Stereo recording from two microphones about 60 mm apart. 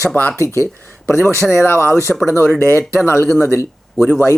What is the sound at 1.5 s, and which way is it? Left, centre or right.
Speech, left.